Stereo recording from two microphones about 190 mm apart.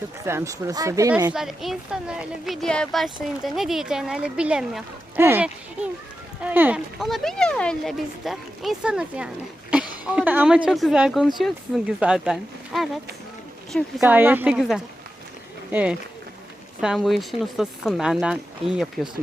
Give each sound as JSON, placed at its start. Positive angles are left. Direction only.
{"t": 0.3, "sound": "speech", "side_deg": -15}
{"t": 1.3, "sound": "speech", "side_deg": 0}
{"t": 14.0, "sound": "speech", "side_deg": -10}